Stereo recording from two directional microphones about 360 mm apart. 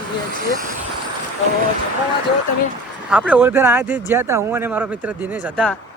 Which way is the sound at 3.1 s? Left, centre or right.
Centre.